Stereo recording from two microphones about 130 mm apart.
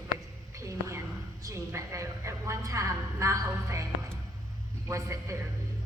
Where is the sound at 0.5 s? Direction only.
25° right (ahead or behind).